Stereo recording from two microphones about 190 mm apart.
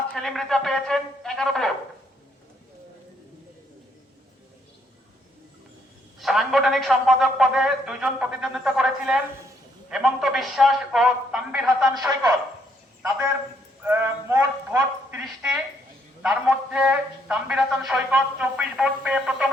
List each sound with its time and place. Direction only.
0.1 s a man's voice: centre (ahead or behind)
6.1 s a man's voice: centre (ahead or behind)
11.9 s a man's voice: 20° right (ahead or behind)
13.8 s sheep: 10° right (ahead or behind)
15.2 s a man's voice: 5° right (ahead or behind)